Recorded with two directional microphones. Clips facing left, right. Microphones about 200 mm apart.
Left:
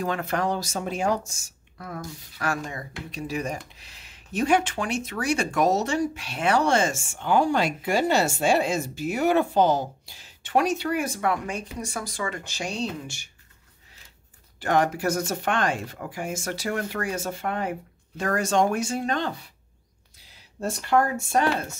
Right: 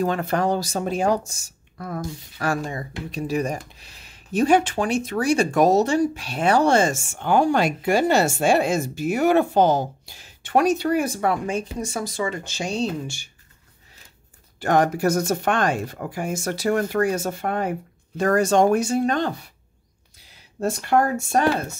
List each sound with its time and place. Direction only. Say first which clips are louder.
0.0 s speech: right 4 dB; 35° right (ahead or behind)
7.2 s speech: right 3 dB; 50° right (ahead or behind); by 13.3 s 30° right (ahead or behind)
14.6 s speech: right 4 dB; 40° right (ahead or behind)
20.6 s speech: right 3 dB; 45° right (ahead or behind)